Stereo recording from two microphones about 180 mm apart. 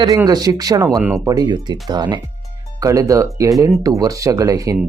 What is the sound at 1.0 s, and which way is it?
Speech, 5° right (ahead or behind).